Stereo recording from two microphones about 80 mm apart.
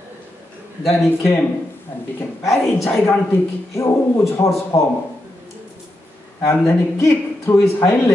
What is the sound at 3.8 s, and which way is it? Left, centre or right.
A man's voice, left.